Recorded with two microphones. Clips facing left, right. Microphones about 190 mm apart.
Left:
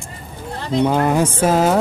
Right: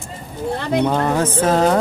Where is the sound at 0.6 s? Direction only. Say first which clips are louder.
Left 1 dB; 60° right (ahead or behind).